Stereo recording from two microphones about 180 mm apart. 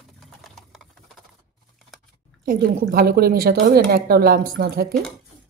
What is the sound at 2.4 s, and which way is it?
Speech, 60° right (ahead or behind).